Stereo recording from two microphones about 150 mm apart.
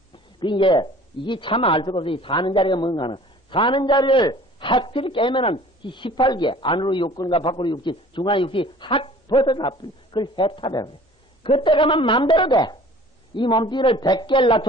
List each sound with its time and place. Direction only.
0.4 s a man's voice: 35° left (ahead or behind)